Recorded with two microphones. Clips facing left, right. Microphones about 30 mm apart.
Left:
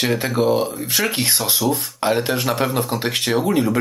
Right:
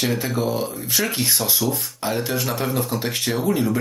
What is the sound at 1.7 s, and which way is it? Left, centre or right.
Speech, left.